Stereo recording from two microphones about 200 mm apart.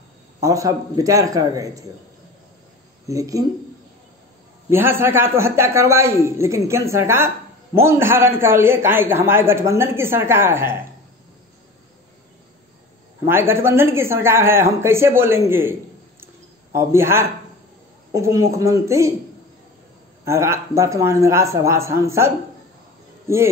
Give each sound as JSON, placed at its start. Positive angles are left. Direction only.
{"t": 0.4, "sound": "a man's voice", "side_deg": -15}
{"t": 3.1, "sound": "a man's voice", "side_deg": -15}
{"t": 4.6, "sound": "a man's voice", "side_deg": -10}
{"t": 13.3, "sound": "a man's voice", "side_deg": -10}
{"t": 16.7, "sound": "a man's voice", "side_deg": -15}
{"t": 20.2, "sound": "a man's voice", "side_deg": -15}